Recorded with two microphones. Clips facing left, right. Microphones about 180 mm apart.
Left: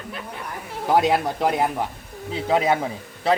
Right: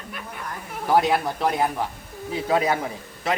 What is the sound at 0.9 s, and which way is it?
A man's voice, 20° left (ahead or behind).